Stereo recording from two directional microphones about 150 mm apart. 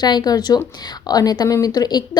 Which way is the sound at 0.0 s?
25° left (ahead or behind).